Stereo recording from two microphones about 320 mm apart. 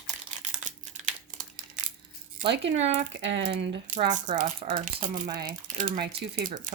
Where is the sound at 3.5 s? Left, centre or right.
Centre.